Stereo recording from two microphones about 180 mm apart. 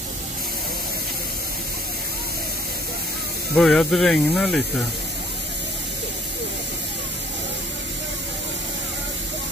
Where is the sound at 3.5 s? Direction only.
Centre (ahead or behind).